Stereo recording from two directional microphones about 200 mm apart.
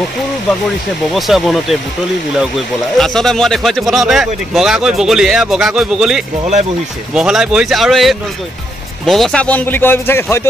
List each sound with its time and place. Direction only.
1.1 s speech: centre (ahead or behind)
3.0 s a man's voice: centre (ahead or behind)